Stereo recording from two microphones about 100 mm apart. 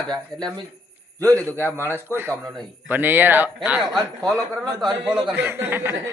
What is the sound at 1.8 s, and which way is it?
Speech, 25° right (ahead or behind).